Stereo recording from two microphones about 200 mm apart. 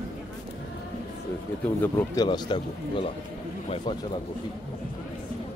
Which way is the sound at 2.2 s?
20° left (ahead or behind).